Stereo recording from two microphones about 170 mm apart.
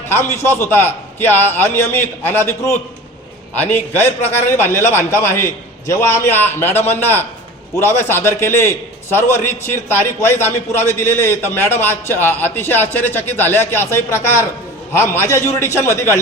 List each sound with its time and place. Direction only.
0.1 s a man's voice: 15° left (ahead or behind)